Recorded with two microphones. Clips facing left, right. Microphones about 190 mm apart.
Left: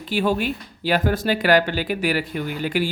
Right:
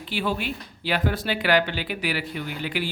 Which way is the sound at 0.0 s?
45° left (ahead or behind).